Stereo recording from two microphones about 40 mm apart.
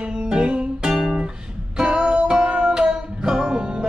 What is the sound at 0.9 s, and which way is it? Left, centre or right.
Music, centre.